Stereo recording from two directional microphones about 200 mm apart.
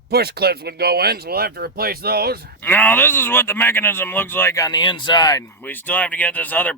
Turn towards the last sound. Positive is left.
turn(degrees=10)  # may be behind; listen again after turning